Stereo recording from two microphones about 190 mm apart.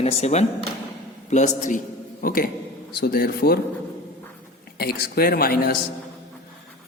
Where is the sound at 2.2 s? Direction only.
50° left (ahead or behind).